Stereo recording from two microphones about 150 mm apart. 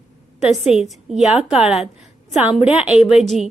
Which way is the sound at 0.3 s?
45° left (ahead or behind).